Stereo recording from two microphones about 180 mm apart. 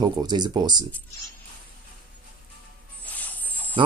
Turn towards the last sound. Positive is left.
turn(degrees=10)  # may be behind; listen again after turning